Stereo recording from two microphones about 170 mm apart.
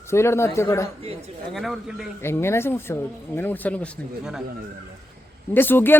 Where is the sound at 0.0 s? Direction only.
15° left (ahead or behind).